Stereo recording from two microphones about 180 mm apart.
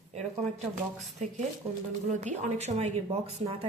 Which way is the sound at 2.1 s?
40° right (ahead or behind).